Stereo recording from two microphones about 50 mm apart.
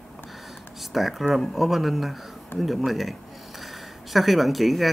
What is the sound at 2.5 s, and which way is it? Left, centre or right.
Speech, left.